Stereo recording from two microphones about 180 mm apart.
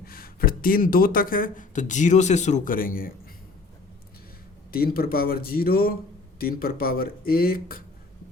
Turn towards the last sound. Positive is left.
turn(degrees=55)  # may be behind; listen again after turning